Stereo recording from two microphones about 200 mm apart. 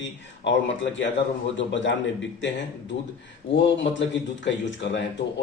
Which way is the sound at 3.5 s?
65° left (ahead or behind).